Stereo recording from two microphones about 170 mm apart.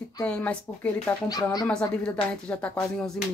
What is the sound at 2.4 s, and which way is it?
Speech, 5° left (ahead or behind).